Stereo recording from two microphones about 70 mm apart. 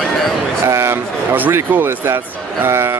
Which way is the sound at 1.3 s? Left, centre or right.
Right.